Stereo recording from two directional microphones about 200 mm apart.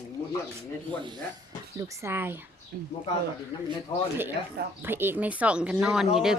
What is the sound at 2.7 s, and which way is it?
Speech, 50° right (ahead or behind).